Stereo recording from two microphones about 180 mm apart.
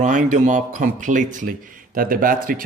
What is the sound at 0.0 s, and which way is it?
Speech, 45° right (ahead or behind).